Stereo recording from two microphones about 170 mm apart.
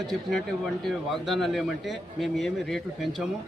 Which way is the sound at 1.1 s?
Centre (ahead or behind).